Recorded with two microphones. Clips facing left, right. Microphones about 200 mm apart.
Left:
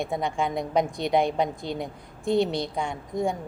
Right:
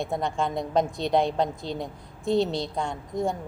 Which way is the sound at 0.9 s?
20° right (ahead or behind).